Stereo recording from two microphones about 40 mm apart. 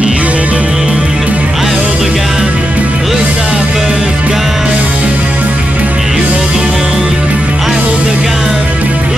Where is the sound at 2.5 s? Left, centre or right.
Right; by 4.1 s centre.